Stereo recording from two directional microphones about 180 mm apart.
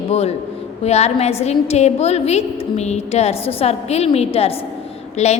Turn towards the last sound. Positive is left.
turn(degrees=40)  # may be behind; listen again after turning